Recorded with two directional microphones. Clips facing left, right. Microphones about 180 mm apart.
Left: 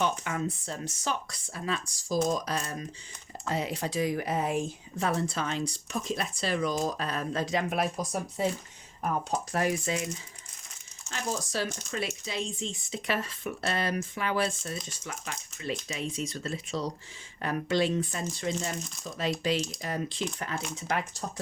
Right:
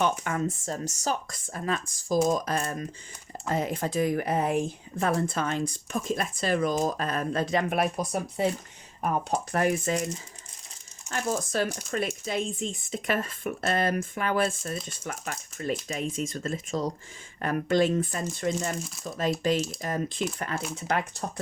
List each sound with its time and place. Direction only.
0.0 s speech: 50° right (ahead or behind)
11.1 s speech: 50° right (ahead or behind)